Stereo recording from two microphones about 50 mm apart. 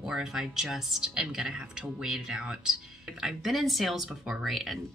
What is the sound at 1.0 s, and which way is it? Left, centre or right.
A woman's voice, centre.